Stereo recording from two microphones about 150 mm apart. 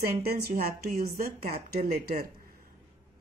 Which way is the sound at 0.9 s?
75° right (ahead or behind).